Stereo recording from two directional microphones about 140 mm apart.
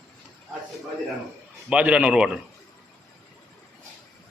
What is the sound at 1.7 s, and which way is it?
Speech, 10° right (ahead or behind).